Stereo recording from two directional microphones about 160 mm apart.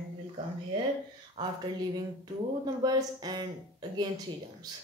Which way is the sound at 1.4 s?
25° right (ahead or behind).